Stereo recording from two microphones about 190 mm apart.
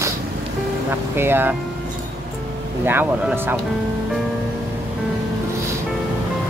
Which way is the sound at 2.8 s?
10° right (ahead or behind).